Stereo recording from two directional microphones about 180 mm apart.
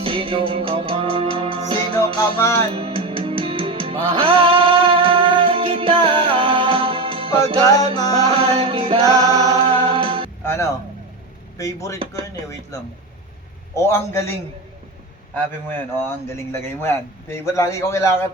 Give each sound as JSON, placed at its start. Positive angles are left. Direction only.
{"t": 0.0, "sound": "music", "side_deg": -30}
{"t": 2.3, "sound": "a man's voice", "side_deg": 15}
{"t": 2.7, "sound": "music", "side_deg": -30}
{"t": 7.8, "sound": "music", "side_deg": 20}
{"t": 8.3, "sound": "music", "side_deg": -30}
{"t": 10.4, "sound": "music", "side_deg": 15}
{"t": 11.5, "sound": "speech", "side_deg": 15}
{"t": 13.7, "sound": "a man's voice", "side_deg": 15}
{"t": 15.7, "sound": "a man's voice", "side_deg": 15}